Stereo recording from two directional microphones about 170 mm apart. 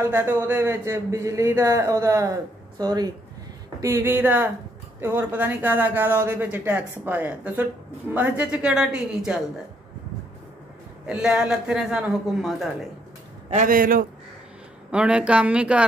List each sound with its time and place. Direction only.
0.0 s a man's voice: 15° right (ahead or behind)
11.1 s a man's voice: 5° right (ahead or behind)
13.5 s a man's voice: 50° right (ahead or behind)
14.9 s speech: 5° right (ahead or behind)